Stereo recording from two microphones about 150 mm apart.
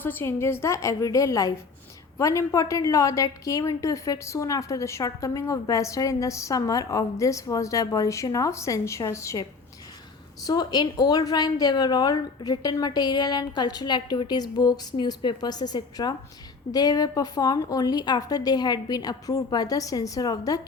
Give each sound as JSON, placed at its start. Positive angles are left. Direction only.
{"t": 0.0, "sound": "a woman's voice", "side_deg": 15}